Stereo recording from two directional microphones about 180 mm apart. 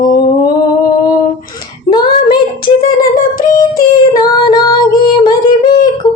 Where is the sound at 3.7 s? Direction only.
20° left (ahead or behind).